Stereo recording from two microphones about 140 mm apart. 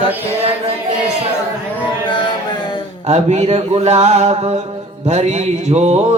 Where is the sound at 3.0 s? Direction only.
50° right (ahead or behind).